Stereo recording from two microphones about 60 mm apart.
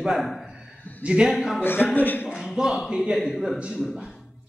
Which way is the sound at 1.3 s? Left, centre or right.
Centre.